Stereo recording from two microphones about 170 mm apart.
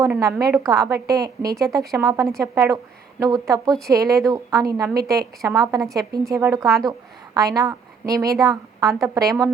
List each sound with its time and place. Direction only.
0.0 s a woman's voice: 20° right (ahead or behind)